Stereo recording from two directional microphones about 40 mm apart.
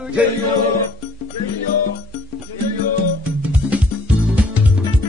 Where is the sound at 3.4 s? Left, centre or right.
Right.